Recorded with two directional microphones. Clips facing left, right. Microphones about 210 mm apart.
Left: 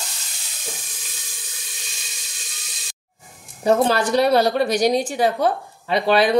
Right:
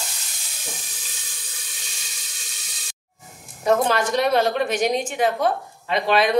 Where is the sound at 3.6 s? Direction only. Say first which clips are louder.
Left 2 dB; 30° left (ahead or behind).